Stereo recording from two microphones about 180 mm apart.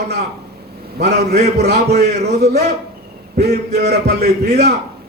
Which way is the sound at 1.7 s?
65° right (ahead or behind).